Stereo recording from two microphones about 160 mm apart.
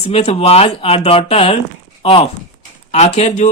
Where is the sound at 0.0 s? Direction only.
40° left (ahead or behind).